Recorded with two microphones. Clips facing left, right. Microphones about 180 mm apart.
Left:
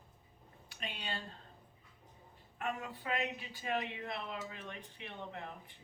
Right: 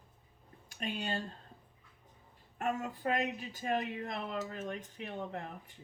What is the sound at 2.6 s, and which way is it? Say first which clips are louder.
Speech: right 5 dB; 45° right (ahead or behind).